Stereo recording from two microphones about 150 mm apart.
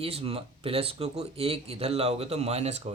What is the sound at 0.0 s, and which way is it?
Speech, 40° right (ahead or behind).